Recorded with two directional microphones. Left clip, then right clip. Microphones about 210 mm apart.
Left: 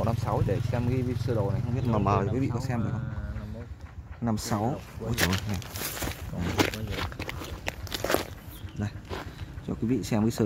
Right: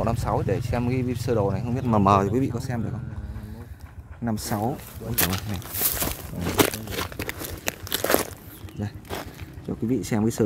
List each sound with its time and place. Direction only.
0.0 s speech: 10° right (ahead or behind)
2.5 s speech: 10° right (ahead or behind)
4.2 s speech: centre (ahead or behind)
5.1 s speech: 35° right (ahead or behind)
6.4 s a sound: 45° right (ahead or behind)
8.8 s speech: 5° left (ahead or behind)